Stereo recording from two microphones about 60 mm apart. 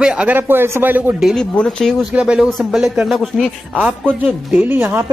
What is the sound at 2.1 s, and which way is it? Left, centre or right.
Speech, centre.